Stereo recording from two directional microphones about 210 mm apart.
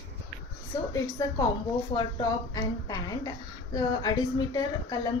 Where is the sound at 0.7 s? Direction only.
15° left (ahead or behind).